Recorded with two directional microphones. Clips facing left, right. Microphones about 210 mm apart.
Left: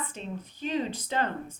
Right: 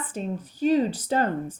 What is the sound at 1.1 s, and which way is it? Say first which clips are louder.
Speech: right 5 dB; 40° right (ahead or behind).